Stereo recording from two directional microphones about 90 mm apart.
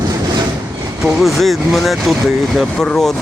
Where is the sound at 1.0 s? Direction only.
Centre (ahead or behind).